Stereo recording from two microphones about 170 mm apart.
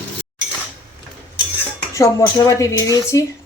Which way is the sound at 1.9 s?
20° left (ahead or behind).